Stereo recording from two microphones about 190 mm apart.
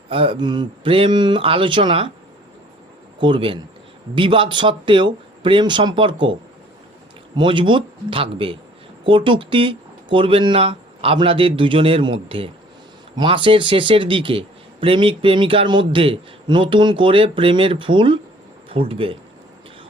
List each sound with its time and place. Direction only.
0.1 s speech: 30° right (ahead or behind)
3.2 s speech: 25° right (ahead or behind)
7.3 s speech: 25° right (ahead or behind)